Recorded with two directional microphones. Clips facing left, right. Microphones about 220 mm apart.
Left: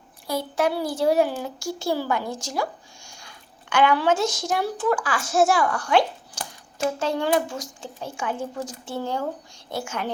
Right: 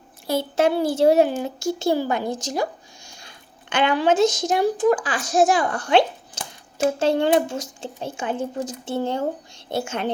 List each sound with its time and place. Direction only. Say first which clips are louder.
0.3 s speech: right 4 dB; 25° right (ahead or behind)